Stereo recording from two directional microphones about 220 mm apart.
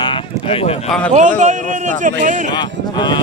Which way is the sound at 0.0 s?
20° left (ahead or behind).